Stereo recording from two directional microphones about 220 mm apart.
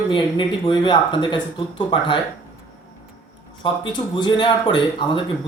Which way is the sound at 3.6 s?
20° left (ahead or behind).